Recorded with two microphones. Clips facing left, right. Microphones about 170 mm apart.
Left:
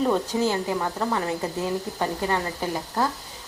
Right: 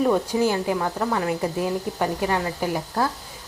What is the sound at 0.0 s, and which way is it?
Speech, 10° right (ahead or behind).